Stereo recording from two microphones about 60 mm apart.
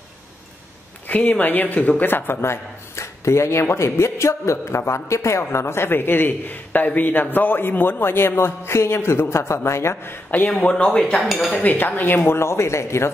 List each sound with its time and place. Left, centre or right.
1.0 s a man's voice: left
10.7 s speech: centre
11.6 s a man's voice: left